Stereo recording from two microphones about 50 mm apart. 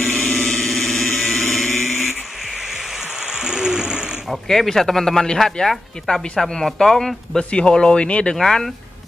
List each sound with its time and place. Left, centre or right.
0.0 s vehicle: centre
0.6 s a sound: centre
2.5 s a sound: centre
4.5 s speech: centre
5.7 s speech: centre; by 8.4 s left
8.4 s speech: centre